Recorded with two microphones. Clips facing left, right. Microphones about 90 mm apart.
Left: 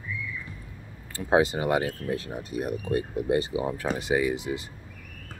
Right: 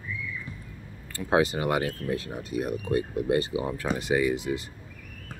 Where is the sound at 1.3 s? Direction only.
25° left (ahead or behind).